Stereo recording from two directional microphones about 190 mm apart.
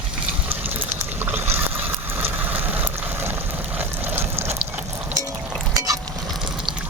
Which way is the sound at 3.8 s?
10° right (ahead or behind).